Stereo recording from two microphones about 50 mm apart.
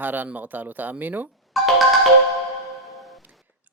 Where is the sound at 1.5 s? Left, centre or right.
Centre.